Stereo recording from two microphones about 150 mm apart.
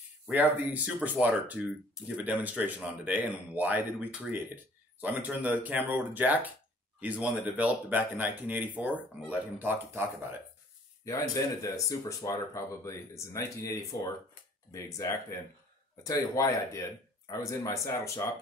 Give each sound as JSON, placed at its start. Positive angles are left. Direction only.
{"t": 0.3, "sound": "speech", "side_deg": -10}
{"t": 11.1, "sound": "speech", "side_deg": 20}